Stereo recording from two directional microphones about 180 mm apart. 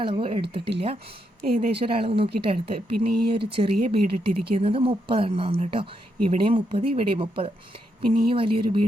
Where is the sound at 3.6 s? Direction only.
40° right (ahead or behind).